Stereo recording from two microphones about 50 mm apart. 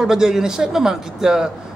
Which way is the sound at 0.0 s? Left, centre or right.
Centre.